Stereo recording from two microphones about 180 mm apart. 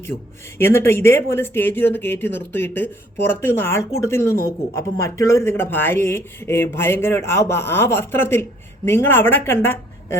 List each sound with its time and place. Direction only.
0.6 s speech: 15° left (ahead or behind)